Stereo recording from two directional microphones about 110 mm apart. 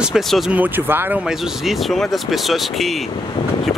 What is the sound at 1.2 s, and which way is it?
Speech, centre (ahead or behind).